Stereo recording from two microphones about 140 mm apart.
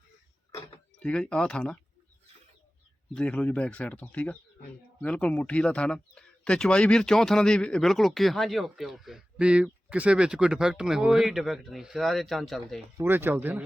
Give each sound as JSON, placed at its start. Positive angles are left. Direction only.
{"t": 0.9, "sound": "speech", "side_deg": 5}
{"t": 3.2, "sound": "speech", "side_deg": 10}
{"t": 13.0, "sound": "speech", "side_deg": -15}